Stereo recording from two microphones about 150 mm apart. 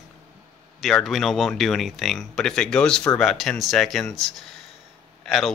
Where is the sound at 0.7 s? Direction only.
Centre (ahead or behind).